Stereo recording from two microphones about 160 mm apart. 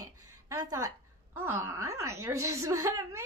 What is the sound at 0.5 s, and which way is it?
Speech, 20° right (ahead or behind).